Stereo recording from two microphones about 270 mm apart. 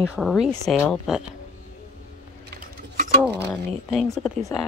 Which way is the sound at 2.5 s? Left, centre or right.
Right.